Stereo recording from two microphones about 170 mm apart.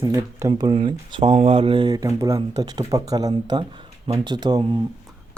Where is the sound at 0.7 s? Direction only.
30° right (ahead or behind).